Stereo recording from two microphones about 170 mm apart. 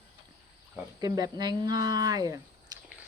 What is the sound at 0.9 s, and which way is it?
Speech, 20° right (ahead or behind).